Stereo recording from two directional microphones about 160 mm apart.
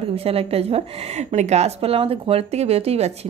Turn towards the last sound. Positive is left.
turn(degrees=-40)  # may be behind; listen again after turning